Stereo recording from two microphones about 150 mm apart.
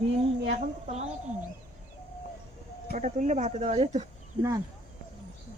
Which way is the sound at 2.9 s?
50° right (ahead or behind).